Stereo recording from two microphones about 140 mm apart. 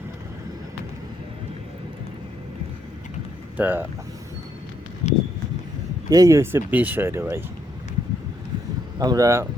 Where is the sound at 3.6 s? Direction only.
15° right (ahead or behind).